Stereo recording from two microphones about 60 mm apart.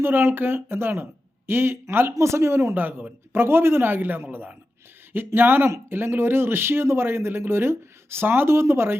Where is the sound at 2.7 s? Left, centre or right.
Right.